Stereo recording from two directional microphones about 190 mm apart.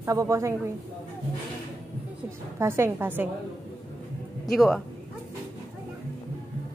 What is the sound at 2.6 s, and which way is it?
Speech, 15° right (ahead or behind).